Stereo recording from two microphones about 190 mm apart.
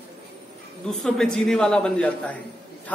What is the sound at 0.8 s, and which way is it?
A man's voice, 5° left (ahead or behind).